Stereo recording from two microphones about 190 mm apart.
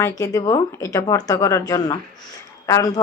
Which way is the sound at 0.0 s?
20° left (ahead or behind).